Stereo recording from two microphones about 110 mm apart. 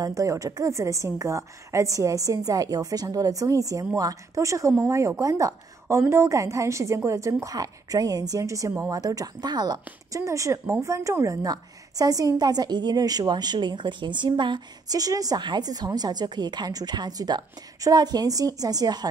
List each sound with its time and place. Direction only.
0.0 s a woman's voice: 30° right (ahead or behind)